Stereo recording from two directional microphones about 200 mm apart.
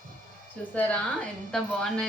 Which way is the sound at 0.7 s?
5° left (ahead or behind).